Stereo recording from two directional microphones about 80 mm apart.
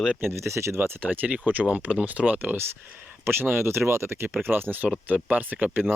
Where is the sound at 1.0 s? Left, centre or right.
Centre.